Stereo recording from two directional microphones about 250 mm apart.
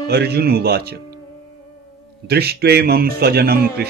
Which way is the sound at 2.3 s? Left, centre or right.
Right.